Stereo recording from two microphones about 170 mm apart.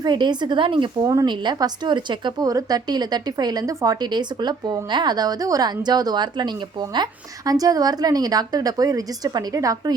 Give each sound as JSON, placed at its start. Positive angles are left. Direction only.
{"t": 0.0, "sound": "a woman's voice", "side_deg": -25}